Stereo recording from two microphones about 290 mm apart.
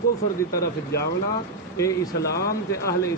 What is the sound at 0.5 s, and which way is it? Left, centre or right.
Speech, left.